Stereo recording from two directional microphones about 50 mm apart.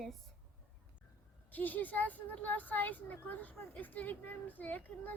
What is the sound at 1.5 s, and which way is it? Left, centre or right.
A woman's voice, left.